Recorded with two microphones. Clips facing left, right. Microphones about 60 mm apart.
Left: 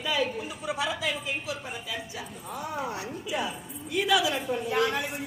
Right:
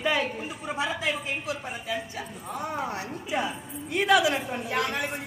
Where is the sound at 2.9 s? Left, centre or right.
Right.